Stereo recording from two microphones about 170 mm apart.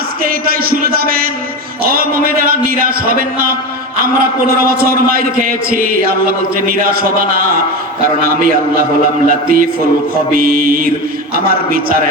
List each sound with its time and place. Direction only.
0.6 s a man's voice: 60° right (ahead or behind)